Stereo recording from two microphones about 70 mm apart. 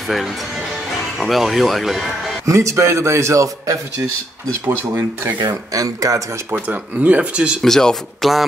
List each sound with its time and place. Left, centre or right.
1.1 s speech: centre
2.4 s speech: right
4.6 s speech: right
5.4 s speech: right
6.7 s speech: right
7.6 s speech: centre